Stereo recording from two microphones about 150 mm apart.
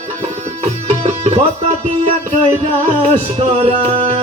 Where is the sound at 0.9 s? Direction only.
45° right (ahead or behind).